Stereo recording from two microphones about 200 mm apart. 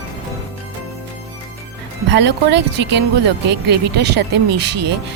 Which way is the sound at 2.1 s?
60° right (ahead or behind).